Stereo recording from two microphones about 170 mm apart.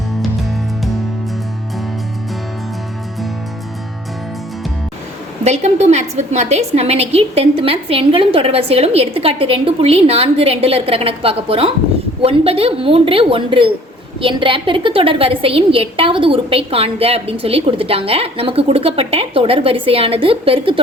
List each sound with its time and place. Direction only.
5.5 s a woman's voice: 40° right (ahead or behind)